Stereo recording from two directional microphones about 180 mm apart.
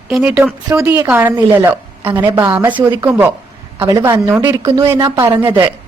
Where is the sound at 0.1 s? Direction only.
5° right (ahead or behind); by 5.4 s 25° right (ahead or behind).